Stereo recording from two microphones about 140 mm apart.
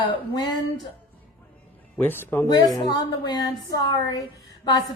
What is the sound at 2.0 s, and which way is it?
Speech, 15° left (ahead or behind).